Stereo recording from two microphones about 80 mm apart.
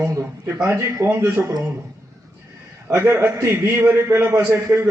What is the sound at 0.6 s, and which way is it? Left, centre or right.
Speech, right.